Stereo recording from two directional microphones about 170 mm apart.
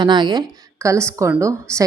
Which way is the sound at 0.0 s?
25° right (ahead or behind).